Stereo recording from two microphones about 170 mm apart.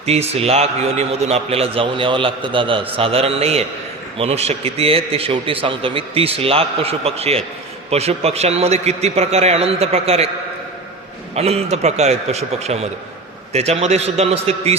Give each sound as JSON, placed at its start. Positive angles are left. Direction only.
{"t": 0.0, "sound": "a man's voice", "side_deg": -35}
{"t": 11.3, "sound": "a man's voice", "side_deg": -35}